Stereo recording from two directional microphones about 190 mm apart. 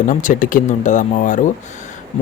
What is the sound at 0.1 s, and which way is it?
Speech, 45° left (ahead or behind).